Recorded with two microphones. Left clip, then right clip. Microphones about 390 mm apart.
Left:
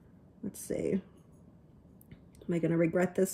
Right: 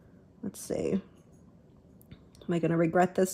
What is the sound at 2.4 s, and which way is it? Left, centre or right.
Speech, right.